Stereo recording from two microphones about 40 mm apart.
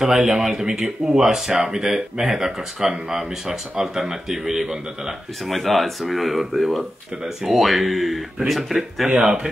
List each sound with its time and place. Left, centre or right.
0.0 s speech: centre
5.4 s speech: centre
9.1 s speech: right